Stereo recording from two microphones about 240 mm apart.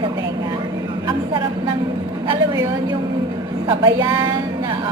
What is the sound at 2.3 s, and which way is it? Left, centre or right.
A woman's voice, centre.